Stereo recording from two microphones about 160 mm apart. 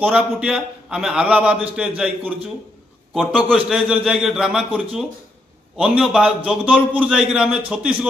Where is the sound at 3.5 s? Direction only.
5° right (ahead or behind).